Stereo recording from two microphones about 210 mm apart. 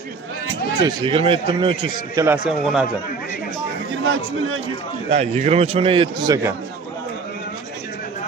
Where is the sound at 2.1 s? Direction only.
10° right (ahead or behind).